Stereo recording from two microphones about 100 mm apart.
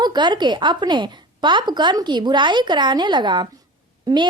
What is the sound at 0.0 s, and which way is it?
Speech, 45° right (ahead or behind).